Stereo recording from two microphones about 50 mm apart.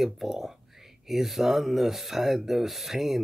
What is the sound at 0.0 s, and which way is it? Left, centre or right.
Speech, centre.